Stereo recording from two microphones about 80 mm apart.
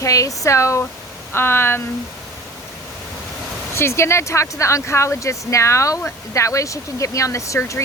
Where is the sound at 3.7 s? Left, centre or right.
Left.